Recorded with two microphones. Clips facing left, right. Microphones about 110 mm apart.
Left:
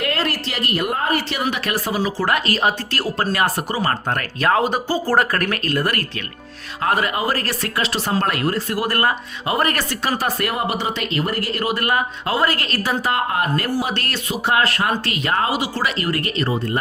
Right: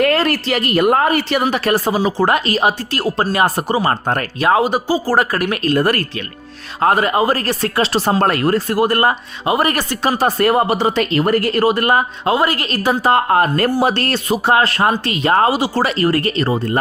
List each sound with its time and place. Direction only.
0.0 s a woman's voice: 55° right (ahead or behind)
1.5 s speech: 35° right (ahead or behind)
4.4 s speech: 15° right (ahead or behind)
5.5 s speech: 20° right (ahead or behind)
6.8 s speech: 30° right (ahead or behind)
8.8 s speech: 25° right (ahead or behind)
9.6 s speech: 15° right (ahead or behind)
10.0 s speech: 25° right (ahead or behind); by 11.6 s 50° right (ahead or behind)
11.6 s speech: 30° right (ahead or behind)